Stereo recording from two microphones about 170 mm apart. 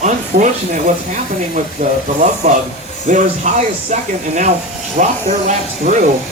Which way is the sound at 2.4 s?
45° right (ahead or behind).